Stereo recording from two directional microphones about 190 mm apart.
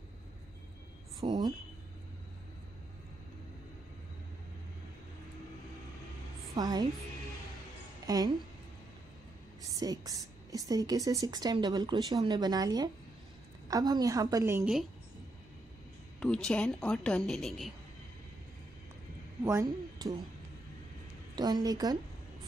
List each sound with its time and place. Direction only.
1.2 s a woman's voice: 20° right (ahead or behind)
6.5 s a woman's voice: 20° right (ahead or behind)
8.1 s a woman's voice: 20° right (ahead or behind)
9.6 s a woman's voice: 20° right (ahead or behind)
14.6 s a woman's voice: centre (ahead or behind)
16.2 s a woman's voice: 5° left (ahead or behind)
19.4 s speech: 15° right (ahead or behind)
21.4 s a woman's voice: 20° right (ahead or behind)